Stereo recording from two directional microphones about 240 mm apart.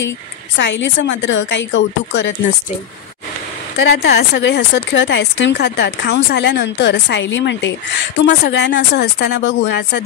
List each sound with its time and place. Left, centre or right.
0.6 s speech: left
3.8 s speech: left